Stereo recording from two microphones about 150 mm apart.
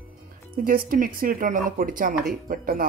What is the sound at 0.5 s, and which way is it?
Speech, 75° right (ahead or behind).